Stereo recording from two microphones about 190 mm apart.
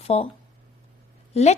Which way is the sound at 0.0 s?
30° left (ahead or behind).